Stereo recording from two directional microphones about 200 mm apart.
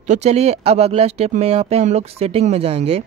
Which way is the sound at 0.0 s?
35° right (ahead or behind).